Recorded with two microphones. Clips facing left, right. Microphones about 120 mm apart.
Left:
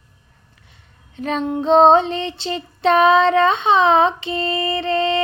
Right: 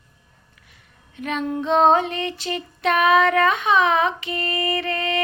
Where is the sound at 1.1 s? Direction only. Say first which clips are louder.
Left 3 dB; 30° left (ahead or behind).